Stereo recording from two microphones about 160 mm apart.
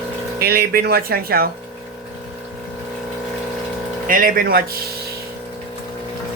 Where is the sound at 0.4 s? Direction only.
75° right (ahead or behind).